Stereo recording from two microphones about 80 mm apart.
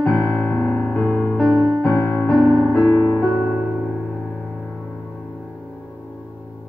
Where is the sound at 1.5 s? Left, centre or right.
Right.